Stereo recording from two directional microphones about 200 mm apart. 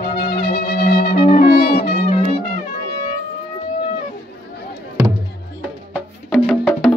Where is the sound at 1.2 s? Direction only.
30° left (ahead or behind).